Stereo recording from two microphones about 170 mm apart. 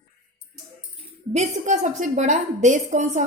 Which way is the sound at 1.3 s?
45° right (ahead or behind).